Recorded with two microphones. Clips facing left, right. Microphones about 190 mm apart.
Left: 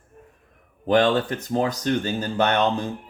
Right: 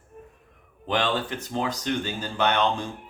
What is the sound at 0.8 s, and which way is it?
Speech, 45° left (ahead or behind).